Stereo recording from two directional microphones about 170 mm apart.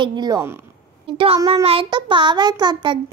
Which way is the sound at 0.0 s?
25° right (ahead or behind).